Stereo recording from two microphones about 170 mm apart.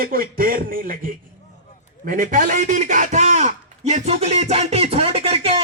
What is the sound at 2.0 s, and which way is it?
A man's voice, 55° right (ahead or behind).